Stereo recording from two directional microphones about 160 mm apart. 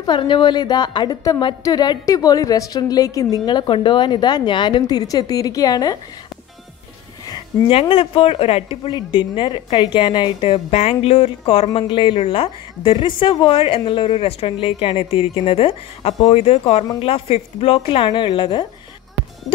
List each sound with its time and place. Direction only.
0.0 s a woman's voice: 30° left (ahead or behind)
7.2 s a sound: 30° left (ahead or behind)
7.9 s a woman's voice: 35° left (ahead or behind)